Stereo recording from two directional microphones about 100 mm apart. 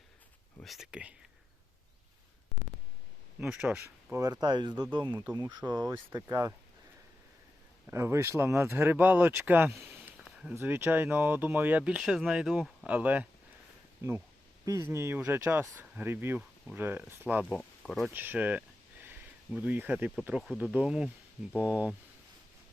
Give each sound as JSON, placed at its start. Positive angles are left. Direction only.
{"t": 0.6, "sound": "speech", "side_deg": 0}
{"t": 0.9, "sound": "speech", "side_deg": -10}
{"t": 3.4, "sound": "speech", "side_deg": -10}
{"t": 3.8, "sound": "speech", "side_deg": -25}
{"t": 4.2, "sound": "speech", "side_deg": -40}
{"t": 7.9, "sound": "speech", "side_deg": -25}
{"t": 10.2, "sound": "a sound", "side_deg": 0}
{"t": 10.5, "sound": "speech", "side_deg": -25}
{"t": 14.6, "sound": "speech", "side_deg": -35}
{"t": 17.5, "sound": "speech", "side_deg": 5}
{"t": 18.1, "sound": "speech", "side_deg": -20}